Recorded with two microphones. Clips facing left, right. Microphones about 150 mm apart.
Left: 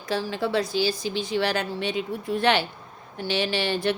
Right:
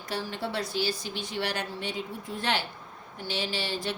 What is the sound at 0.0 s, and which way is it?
Speech, 90° left.